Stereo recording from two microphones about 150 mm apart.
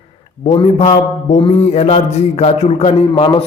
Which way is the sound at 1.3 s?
40° left (ahead or behind).